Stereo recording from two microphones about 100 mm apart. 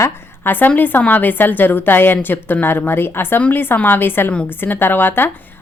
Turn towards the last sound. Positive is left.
turn(degrees=20)  # may be behind; listen again after turning